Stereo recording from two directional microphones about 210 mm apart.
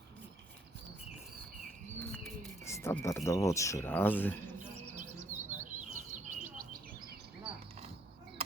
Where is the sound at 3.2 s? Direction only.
15° left (ahead or behind).